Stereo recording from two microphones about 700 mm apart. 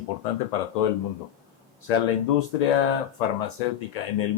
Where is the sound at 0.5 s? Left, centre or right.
Left.